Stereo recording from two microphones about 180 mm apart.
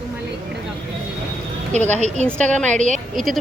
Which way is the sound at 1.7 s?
40° right (ahead or behind).